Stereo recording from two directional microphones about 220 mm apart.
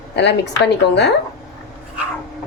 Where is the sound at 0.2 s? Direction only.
50° left (ahead or behind).